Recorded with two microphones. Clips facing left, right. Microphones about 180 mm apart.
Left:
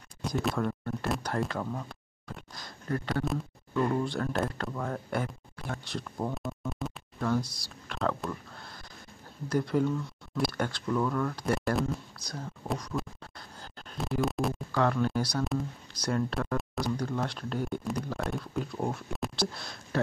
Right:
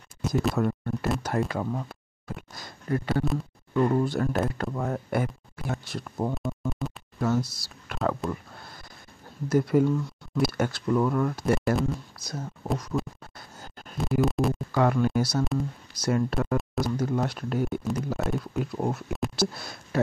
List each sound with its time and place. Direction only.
0.2 s speech: 5° right (ahead or behind)
3.7 s speech: 20° right (ahead or behind)
4.0 s speech: 10° right (ahead or behind)
9.5 s speech: 10° right (ahead or behind)
12.3 s a sound: 5° right (ahead or behind)
14.7 s speech: 10° right (ahead or behind)